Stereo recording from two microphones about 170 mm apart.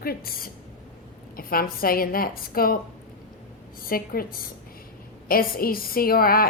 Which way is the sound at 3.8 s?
60° left (ahead or behind).